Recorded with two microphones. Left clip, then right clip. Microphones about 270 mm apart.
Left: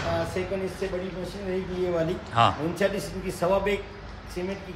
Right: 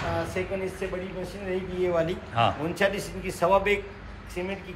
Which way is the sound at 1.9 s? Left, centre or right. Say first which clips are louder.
Left 4 dB; centre.